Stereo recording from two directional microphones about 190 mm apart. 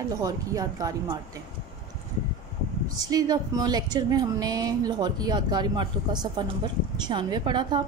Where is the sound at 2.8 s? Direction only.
20° right (ahead or behind).